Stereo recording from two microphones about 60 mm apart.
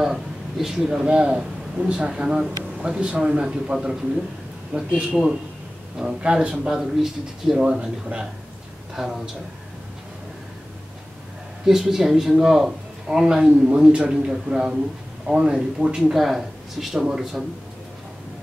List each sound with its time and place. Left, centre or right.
0.0 s a man's voice: centre; by 4.9 s right
5.9 s speech: centre
8.9 s speech: centre
11.6 s speech: centre
16.0 s speech: centre